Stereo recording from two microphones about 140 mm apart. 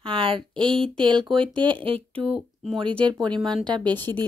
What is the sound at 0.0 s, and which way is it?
Speech, 40° right (ahead or behind).